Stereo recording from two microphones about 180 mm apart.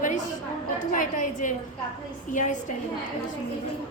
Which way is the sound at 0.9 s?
45° left (ahead or behind).